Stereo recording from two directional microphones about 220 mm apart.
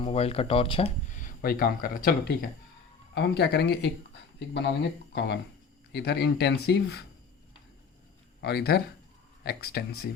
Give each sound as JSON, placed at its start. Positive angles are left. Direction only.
{"t": 0.0, "sound": "speech", "side_deg": 25}
{"t": 8.4, "sound": "speech", "side_deg": 50}